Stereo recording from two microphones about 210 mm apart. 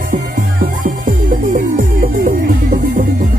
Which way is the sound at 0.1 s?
40° right (ahead or behind).